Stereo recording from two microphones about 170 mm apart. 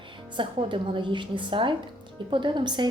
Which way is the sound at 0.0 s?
30° right (ahead or behind).